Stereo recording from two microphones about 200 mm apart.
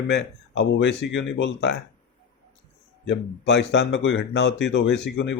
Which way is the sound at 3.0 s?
65° left (ahead or behind).